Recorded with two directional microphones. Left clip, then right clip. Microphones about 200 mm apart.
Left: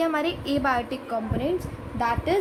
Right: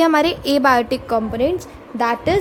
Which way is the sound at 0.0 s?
50° right (ahead or behind).